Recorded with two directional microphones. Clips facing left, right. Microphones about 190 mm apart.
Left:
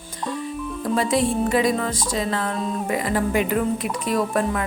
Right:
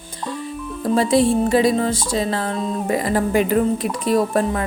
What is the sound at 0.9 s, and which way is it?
Music, 30° right (ahead or behind).